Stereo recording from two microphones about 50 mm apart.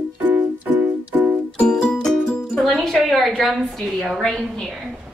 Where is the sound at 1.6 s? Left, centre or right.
Centre.